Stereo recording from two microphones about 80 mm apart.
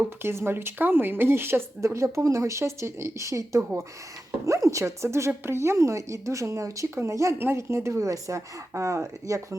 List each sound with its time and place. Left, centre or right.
0.2 s speech: right